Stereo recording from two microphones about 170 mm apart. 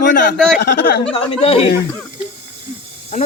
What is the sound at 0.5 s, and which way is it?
Speech, 75° left (ahead or behind).